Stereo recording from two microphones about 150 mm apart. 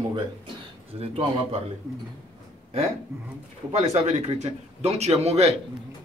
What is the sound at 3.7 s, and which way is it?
A man's voice, 45° right (ahead or behind).